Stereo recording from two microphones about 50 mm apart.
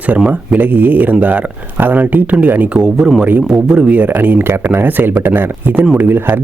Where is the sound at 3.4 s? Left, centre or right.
Centre.